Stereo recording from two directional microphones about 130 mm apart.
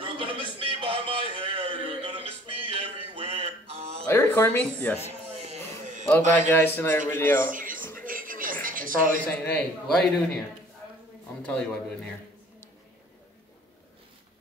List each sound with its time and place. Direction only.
0.0 s a sound: 40° right (ahead or behind)
4.1 s speech: 15° left (ahead or behind)
5.5 s a sound: 70° right (ahead or behind)
6.3 s speech: 15° left (ahead or behind)
7.4 s music: 90° right
8.0 s television: 90° right
9.2 s a man's voice: 10° left (ahead or behind)
11.4 s speech: 10° left (ahead or behind)